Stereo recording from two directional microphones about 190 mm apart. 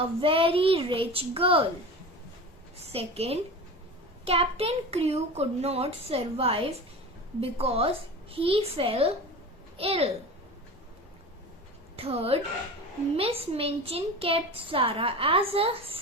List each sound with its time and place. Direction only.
0.2 s a woman's voice: 30° right (ahead or behind)
2.8 s a child's voice: 30° right (ahead or behind)
11.9 s a child's voice: 30° right (ahead or behind)